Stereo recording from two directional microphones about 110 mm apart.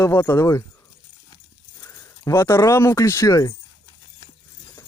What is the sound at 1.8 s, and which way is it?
Speech, 25° left (ahead or behind).